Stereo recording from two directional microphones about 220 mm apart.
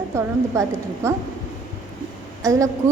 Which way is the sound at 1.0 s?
15° right (ahead or behind).